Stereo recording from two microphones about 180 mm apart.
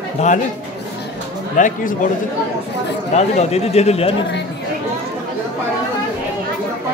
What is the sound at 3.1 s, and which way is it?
A man's voice, 35° left (ahead or behind).